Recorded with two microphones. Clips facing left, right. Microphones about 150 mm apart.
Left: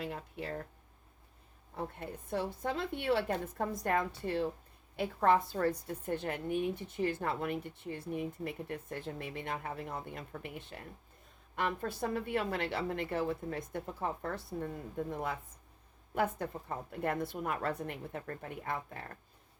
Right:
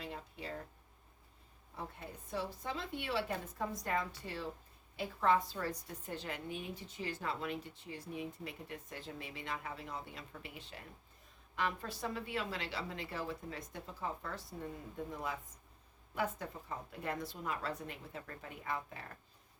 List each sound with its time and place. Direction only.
0.0 s a woman's voice: 60° left (ahead or behind)
1.7 s a woman's voice: 60° left (ahead or behind)